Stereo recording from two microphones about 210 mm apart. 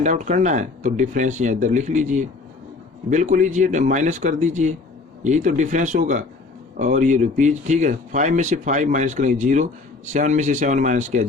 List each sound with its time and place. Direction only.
0.0 s speech: 35° right (ahead or behind)